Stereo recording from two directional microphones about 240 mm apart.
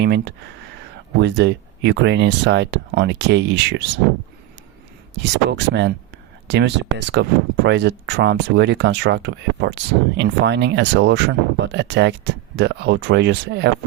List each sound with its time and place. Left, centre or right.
0.0 s speech: right
5.1 s speech: right